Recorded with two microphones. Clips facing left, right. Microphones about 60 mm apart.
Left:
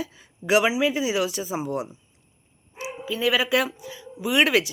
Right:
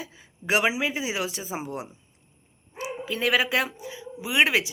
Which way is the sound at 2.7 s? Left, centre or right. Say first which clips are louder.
Left 1 dB; right.